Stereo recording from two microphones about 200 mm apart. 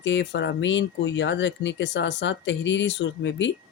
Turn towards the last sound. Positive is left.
turn(degrees=65)  # may be behind; listen again after turning